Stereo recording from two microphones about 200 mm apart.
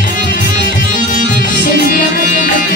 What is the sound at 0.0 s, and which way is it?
Music, 45° left (ahead or behind).